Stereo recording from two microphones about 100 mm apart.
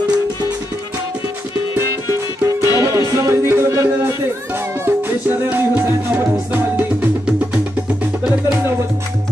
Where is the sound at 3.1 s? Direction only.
30° right (ahead or behind).